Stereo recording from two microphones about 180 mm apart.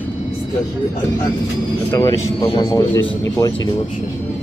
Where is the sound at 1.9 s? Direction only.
20° left (ahead or behind).